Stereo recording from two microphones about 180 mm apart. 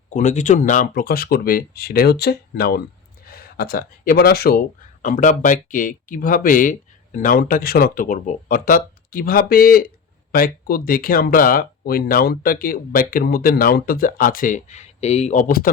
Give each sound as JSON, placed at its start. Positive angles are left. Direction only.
{"t": 0.1, "sound": "speech", "side_deg": 40}
{"t": 5.0, "sound": "speech", "side_deg": 45}